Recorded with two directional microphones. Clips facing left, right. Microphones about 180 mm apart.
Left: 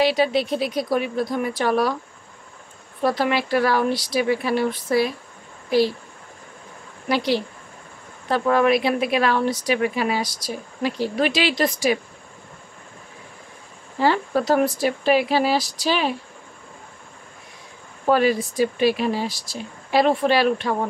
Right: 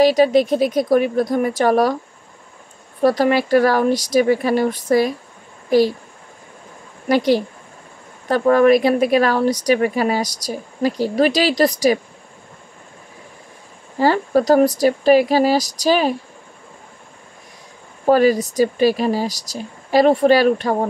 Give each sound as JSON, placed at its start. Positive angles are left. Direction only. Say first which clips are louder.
{"t": 0.0, "sound": "speech", "louder": "right 6 dB", "side_deg": -40}
{"t": 3.0, "sound": "speech", "louder": "right 6 dB", "side_deg": -40}
{"t": 7.1, "sound": "a woman's voice", "louder": "right 6 dB", "side_deg": -45}
{"t": 13.9, "sound": "a woman's voice", "louder": "right 4 dB", "side_deg": -40}
{"t": 18.0, "sound": "a woman's voice", "louder": "right 5 dB", "side_deg": -40}